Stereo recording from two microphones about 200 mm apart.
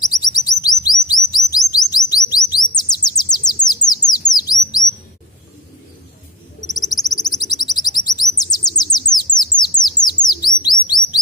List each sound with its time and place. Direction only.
0.0 s chirp: 20° left (ahead or behind)
3.6 s bird: 20° left (ahead or behind)
6.7 s bird: 20° left (ahead or behind)